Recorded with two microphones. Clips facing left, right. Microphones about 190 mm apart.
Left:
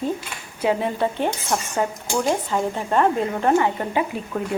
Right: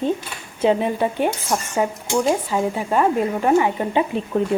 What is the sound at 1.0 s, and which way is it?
A woman's voice, 15° right (ahead or behind).